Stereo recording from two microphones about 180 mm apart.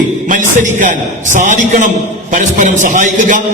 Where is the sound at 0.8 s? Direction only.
45° right (ahead or behind).